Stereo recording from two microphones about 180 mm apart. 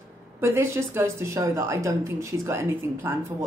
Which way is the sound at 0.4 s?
15° right (ahead or behind).